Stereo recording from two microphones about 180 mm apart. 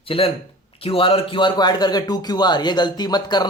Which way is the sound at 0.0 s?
30° left (ahead or behind).